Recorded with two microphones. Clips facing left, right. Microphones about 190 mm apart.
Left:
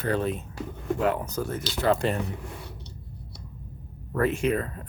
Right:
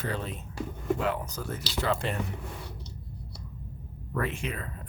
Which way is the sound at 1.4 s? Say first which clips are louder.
Left 5 dB; 45° left (ahead or behind).